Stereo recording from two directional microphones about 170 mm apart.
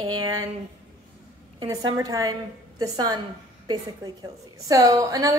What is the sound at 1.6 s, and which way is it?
A woman's voice, 20° right (ahead or behind).